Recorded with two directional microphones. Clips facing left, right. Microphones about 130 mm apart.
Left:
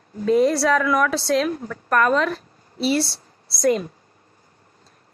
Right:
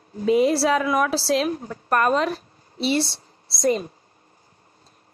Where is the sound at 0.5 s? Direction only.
25° right (ahead or behind).